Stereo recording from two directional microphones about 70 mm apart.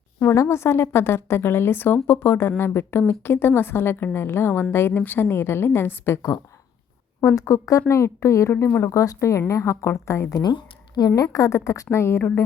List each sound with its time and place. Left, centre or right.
0.2 s a woman's voice: left
7.3 s a woman's voice: left
10.2 s speech: left
11.1 s a woman's voice: left